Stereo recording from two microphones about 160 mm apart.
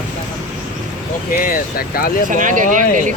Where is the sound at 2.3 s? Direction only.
55° right (ahead or behind).